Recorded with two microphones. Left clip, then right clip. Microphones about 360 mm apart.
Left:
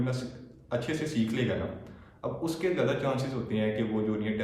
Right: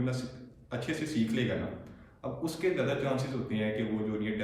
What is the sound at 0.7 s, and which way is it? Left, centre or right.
Speech, centre.